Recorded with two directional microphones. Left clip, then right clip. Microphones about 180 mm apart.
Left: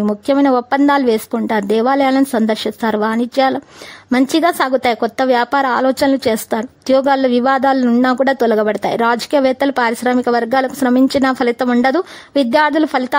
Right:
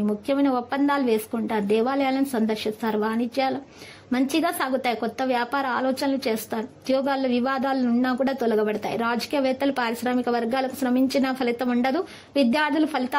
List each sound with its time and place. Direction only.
0.3 s a woman's voice: 45° left (ahead or behind)